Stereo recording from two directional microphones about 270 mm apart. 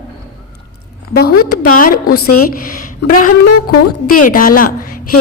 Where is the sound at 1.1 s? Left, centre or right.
Left.